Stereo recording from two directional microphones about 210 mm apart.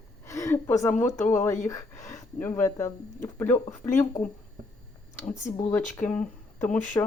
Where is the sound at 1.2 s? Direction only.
10° left (ahead or behind).